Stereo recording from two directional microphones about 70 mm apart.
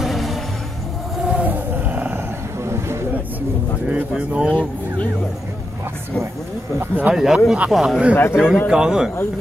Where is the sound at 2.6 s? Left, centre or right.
Right.